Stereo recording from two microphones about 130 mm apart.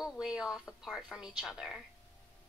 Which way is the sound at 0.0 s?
5° right (ahead or behind).